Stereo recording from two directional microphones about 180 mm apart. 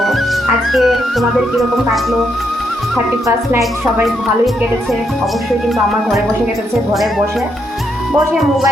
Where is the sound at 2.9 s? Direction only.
15° right (ahead or behind).